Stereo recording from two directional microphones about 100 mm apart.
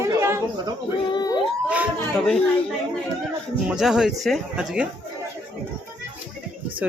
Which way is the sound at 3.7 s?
5° right (ahead or behind).